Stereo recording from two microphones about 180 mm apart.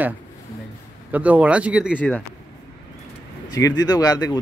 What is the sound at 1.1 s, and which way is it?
Speech, 10° right (ahead or behind).